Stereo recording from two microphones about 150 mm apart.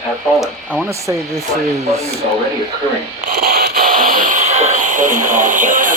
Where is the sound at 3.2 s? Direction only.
85° right.